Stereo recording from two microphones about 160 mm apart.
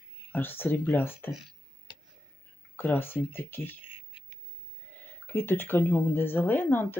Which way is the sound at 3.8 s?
30° left (ahead or behind).